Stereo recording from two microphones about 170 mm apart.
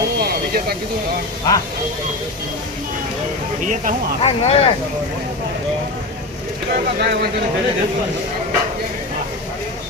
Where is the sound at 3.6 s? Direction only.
45° right (ahead or behind).